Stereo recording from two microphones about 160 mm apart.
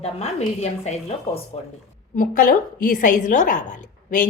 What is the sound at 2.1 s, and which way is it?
A woman's voice, 60° left (ahead or behind).